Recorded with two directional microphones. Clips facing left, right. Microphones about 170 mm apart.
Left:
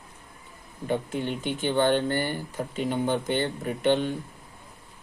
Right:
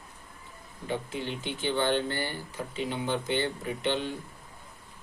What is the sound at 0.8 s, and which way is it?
Speech, 50° left (ahead or behind).